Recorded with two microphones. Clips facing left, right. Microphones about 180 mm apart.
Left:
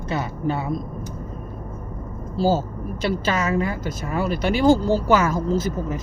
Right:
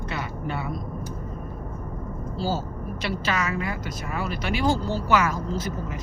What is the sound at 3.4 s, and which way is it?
Speech, 30° left (ahead or behind).